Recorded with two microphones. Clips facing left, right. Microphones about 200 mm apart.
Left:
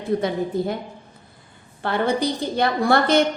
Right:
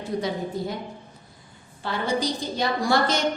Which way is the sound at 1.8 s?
60° left (ahead or behind).